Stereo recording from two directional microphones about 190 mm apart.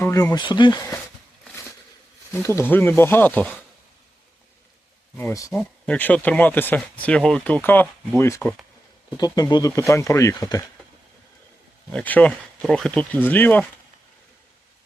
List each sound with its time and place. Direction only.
0.0 s speech: 15° left (ahead or behind)
2.3 s speech: 15° left (ahead or behind)
5.1 s speech: 15° left (ahead or behind)
5.5 s speech: 5° left (ahead or behind)
9.0 s speech: 20° left (ahead or behind)
11.9 s speech: 5° left (ahead or behind)